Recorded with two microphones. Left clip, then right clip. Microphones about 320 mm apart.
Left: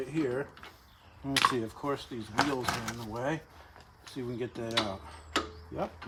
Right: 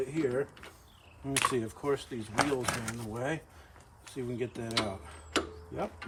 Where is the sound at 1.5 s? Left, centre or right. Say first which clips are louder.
Right 1 dB; centre.